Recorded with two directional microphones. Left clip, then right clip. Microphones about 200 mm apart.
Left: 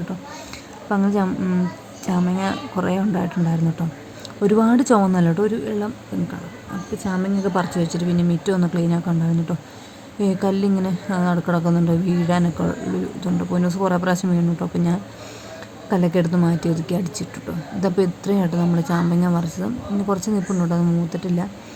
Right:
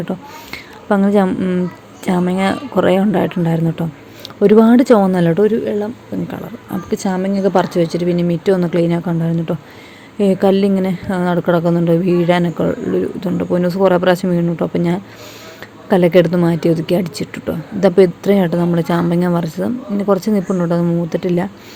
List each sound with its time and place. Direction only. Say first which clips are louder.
0.5 s speech: right 8 dB; 20° right (ahead or behind)
7.0 s speech: right 6 dB; 25° right (ahead or behind)